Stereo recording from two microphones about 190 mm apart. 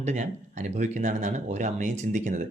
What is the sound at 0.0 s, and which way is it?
Speech, 40° right (ahead or behind).